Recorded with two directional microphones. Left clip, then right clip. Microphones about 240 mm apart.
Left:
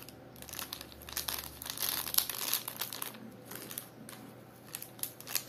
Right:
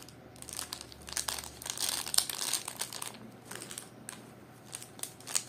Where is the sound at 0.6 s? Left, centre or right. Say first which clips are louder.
Right 1 dB; centre.